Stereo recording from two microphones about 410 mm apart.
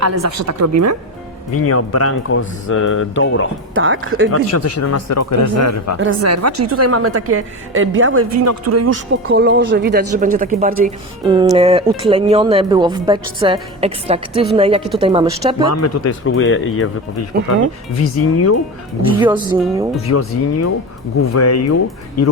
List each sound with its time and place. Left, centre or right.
0.0 s a woman's voice: right
1.5 s speech: left
3.8 s a woman's voice: right
4.3 s speech: left
6.0 s a woman's voice: right
9.3 s a woman's voice: right
15.7 s speech: left
18.3 s speech: left
19.2 s speech: centre
20.1 s speech: left